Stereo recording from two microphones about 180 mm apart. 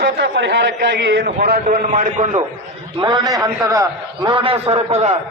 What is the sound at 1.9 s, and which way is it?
Speech, 40° right (ahead or behind).